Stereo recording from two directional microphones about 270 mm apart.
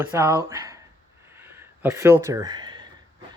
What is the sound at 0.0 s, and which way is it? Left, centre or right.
Speech, centre.